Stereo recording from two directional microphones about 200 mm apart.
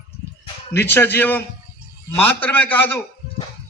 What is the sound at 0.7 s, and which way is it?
A man's voice, 10° left (ahead or behind).